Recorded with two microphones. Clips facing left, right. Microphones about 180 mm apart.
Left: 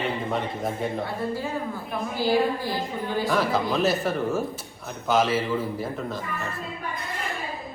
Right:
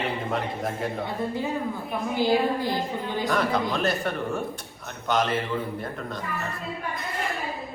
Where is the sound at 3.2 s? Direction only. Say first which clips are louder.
Even; centre (ahead or behind).